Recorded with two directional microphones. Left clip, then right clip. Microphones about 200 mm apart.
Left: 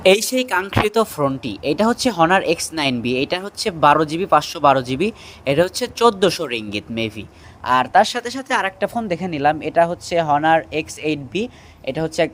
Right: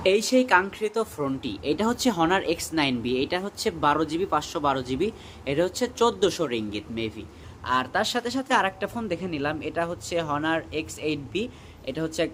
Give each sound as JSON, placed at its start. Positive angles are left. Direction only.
{"t": 0.0, "sound": "speech", "side_deg": 50}